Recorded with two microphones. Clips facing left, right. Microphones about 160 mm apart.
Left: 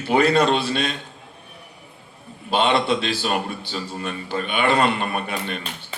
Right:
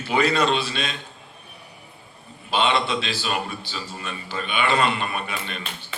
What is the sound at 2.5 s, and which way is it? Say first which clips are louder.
A man's voice: left 3 dB; 55° left (ahead or behind).